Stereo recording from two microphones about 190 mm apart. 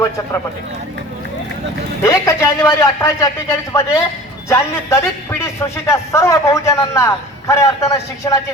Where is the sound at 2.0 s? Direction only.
15° left (ahead or behind).